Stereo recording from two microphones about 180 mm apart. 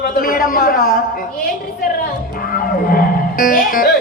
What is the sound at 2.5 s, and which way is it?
Music, 55° left (ahead or behind).